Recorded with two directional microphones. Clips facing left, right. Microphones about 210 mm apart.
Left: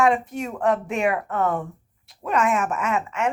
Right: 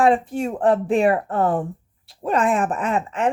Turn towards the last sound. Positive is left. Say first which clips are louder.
# right 3 dB
turn(degrees=-35)  # may be behind; listen again after turning